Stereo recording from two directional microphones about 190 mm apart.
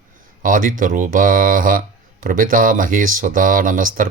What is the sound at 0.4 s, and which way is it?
Speech, 45° right (ahead or behind).